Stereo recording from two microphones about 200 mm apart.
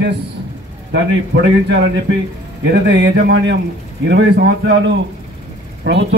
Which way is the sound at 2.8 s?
55° right (ahead or behind).